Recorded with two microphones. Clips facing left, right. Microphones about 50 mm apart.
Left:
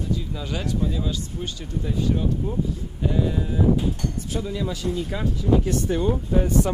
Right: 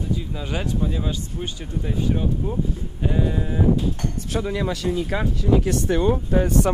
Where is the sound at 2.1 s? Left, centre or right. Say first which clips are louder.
Right 1 dB; centre.